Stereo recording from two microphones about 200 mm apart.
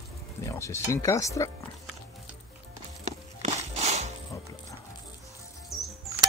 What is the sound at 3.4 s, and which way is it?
Music, 35° right (ahead or behind).